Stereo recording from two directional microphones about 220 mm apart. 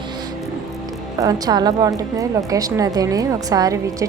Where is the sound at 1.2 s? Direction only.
15° right (ahead or behind).